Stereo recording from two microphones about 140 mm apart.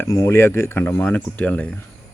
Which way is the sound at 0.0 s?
20° left (ahead or behind).